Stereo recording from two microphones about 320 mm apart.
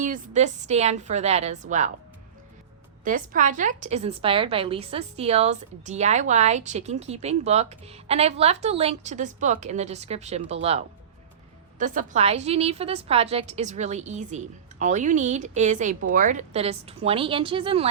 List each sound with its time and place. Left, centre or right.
0.0 s a woman's voice: right
3.0 s a woman's voice: right